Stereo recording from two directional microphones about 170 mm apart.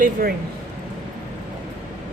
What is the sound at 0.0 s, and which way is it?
Speech, 55° right (ahead or behind).